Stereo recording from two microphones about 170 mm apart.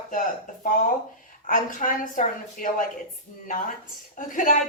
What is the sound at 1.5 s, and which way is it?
A woman's voice, 50° left (ahead or behind).